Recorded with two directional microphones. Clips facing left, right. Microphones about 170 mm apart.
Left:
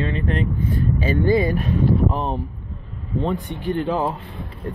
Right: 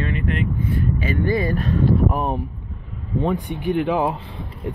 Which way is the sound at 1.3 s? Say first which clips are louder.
Left 2 dB; 20° left (ahead or behind).